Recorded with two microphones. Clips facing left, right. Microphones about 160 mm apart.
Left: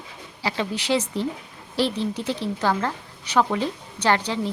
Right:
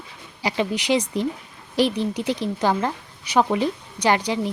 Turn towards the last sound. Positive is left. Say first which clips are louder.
# right 2 dB
turn(degrees=-15)  # may be behind; listen again after turning